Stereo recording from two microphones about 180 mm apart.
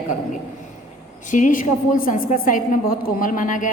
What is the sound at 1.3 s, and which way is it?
A woman's voice, 45° left (ahead or behind).